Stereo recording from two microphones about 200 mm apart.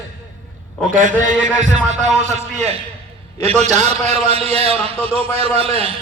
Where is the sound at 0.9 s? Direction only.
40° right (ahead or behind).